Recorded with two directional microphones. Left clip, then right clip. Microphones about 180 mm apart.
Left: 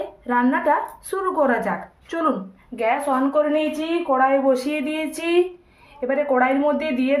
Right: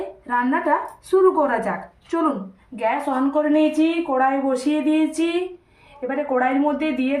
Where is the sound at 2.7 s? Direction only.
50° left (ahead or behind).